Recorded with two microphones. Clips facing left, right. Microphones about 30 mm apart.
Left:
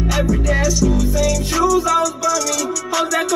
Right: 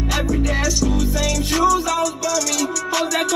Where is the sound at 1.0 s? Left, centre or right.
Right.